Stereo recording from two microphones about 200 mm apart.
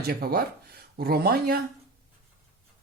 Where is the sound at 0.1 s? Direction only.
50° right (ahead or behind).